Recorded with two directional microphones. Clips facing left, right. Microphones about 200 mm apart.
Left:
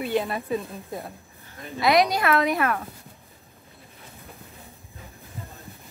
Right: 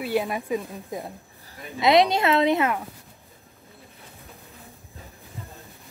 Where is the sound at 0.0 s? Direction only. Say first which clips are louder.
Even; 10° right (ahead or behind).